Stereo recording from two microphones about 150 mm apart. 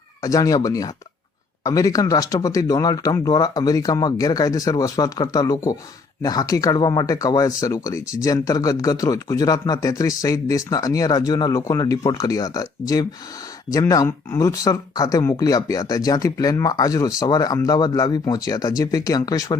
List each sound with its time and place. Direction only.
0.2 s speech: 25° left (ahead or behind)